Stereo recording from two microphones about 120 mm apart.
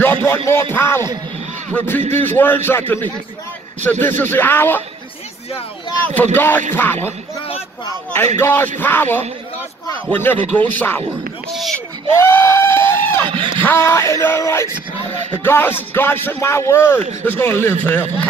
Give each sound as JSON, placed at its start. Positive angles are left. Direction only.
{"t": 0.0, "sound": "music", "side_deg": 20}
{"t": 1.7, "sound": "speech", "side_deg": 15}
{"t": 6.3, "sound": "speech", "side_deg": 15}
{"t": 6.7, "sound": "music", "side_deg": 20}
{"t": 8.4, "sound": "music", "side_deg": 20}
{"t": 8.7, "sound": "speech", "side_deg": 15}
{"t": 11.5, "sound": "speech", "side_deg": 0}
{"t": 12.2, "sound": "a sound", "side_deg": 20}
{"t": 13.2, "sound": "a sound", "side_deg": -40}
{"t": 13.6, "sound": "music", "side_deg": 20}
{"t": 15.3, "sound": "speech", "side_deg": 20}